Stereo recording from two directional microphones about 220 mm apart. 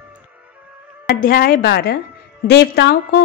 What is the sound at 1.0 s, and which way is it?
A woman's voice, 45° left (ahead or behind).